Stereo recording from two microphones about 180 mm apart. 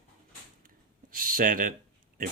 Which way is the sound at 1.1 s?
50° right (ahead or behind).